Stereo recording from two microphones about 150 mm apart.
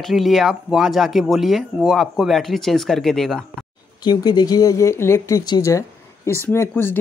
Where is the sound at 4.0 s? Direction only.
30° left (ahead or behind).